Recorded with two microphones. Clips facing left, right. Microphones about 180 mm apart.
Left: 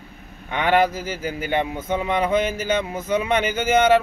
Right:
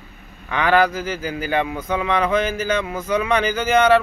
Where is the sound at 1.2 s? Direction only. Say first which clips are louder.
Even; 25° left (ahead or behind).